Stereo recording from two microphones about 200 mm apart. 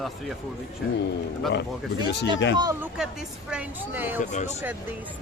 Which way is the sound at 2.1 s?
60° left (ahead or behind).